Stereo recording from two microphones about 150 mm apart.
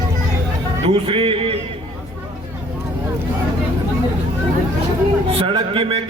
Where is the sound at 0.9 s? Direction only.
40° right (ahead or behind).